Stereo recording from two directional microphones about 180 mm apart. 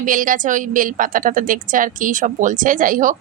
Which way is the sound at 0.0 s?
50° right (ahead or behind).